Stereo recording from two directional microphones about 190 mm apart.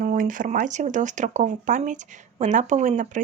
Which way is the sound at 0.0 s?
45° right (ahead or behind).